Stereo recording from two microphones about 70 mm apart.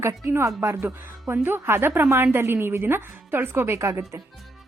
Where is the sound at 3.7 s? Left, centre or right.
Right.